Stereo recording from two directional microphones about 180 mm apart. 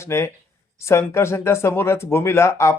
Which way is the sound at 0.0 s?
15° left (ahead or behind).